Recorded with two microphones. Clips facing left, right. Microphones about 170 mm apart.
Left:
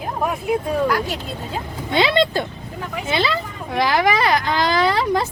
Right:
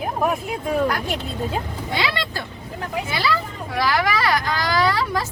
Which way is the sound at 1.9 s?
25° left (ahead or behind).